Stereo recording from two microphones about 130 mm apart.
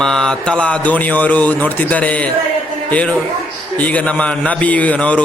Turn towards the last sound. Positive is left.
turn(degrees=10)  # may be behind; listen again after turning